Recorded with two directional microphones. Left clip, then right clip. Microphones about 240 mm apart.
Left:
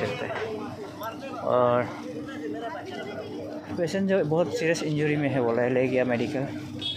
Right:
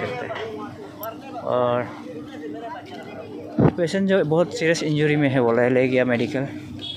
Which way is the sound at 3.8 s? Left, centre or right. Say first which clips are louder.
Right 5 dB; centre.